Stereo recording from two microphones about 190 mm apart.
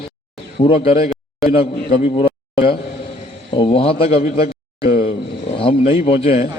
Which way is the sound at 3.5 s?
30° left (ahead or behind).